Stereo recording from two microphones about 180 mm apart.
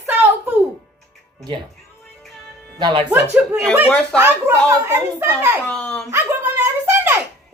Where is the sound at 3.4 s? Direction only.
10° right (ahead or behind).